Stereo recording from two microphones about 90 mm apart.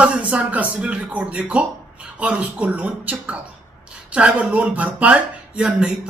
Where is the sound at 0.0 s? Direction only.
15° right (ahead or behind).